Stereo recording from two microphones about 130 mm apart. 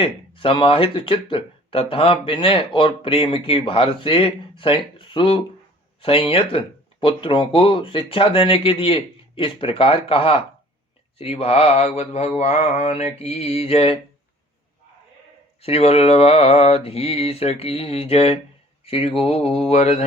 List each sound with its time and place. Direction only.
0.0 s speech: 45° left (ahead or behind)
15.6 s speech: 50° left (ahead or behind)